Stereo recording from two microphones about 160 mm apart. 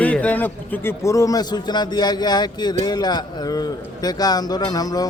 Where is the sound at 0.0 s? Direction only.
10° left (ahead or behind).